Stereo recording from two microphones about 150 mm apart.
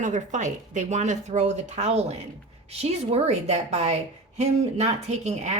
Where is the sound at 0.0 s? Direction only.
55° right (ahead or behind).